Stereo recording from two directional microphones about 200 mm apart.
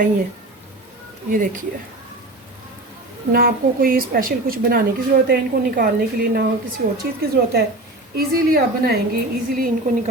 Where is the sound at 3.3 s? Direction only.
45° right (ahead or behind).